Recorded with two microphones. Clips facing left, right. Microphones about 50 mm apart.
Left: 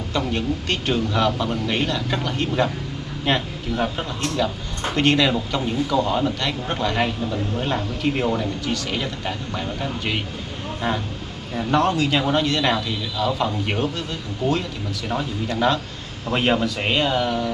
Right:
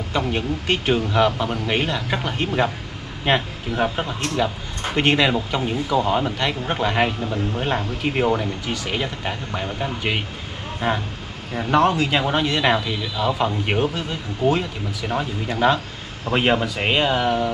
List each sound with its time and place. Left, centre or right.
0.1 s speech: centre